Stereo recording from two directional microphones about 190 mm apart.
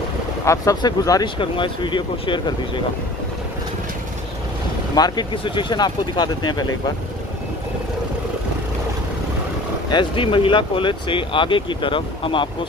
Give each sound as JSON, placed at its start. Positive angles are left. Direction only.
{"t": 0.5, "sound": "speech", "side_deg": 20}
{"t": 4.9, "sound": "speech", "side_deg": 20}
{"t": 9.8, "sound": "speech", "side_deg": 25}